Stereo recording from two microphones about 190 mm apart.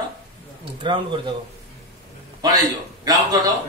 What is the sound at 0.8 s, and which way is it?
Speech, 25° right (ahead or behind).